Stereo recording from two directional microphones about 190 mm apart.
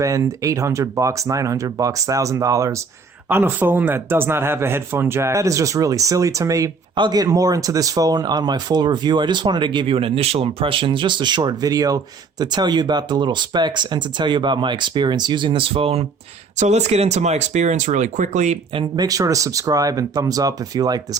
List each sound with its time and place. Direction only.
0.0 s speech: 15° right (ahead or behind)